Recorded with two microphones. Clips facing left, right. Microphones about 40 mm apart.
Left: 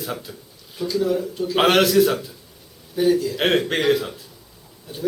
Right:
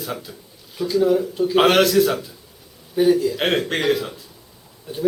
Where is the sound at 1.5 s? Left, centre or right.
Centre.